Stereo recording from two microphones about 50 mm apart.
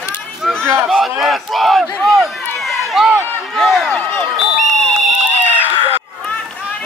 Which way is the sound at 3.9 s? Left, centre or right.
Left.